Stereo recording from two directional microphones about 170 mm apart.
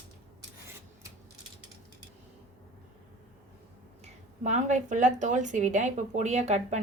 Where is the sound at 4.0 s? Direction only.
45° right (ahead or behind).